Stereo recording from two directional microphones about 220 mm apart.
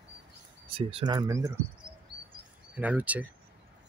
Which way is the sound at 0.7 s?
25° right (ahead or behind).